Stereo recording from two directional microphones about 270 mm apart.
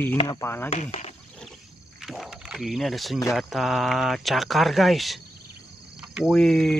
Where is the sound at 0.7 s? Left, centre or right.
Left.